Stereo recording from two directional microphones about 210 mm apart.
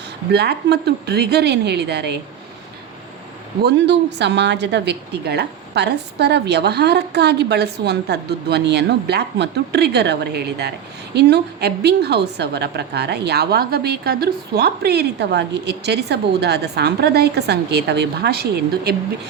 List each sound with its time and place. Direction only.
0.3 s a woman's voice: 50° right (ahead or behind)
3.6 s a woman's voice: 55° right (ahead or behind)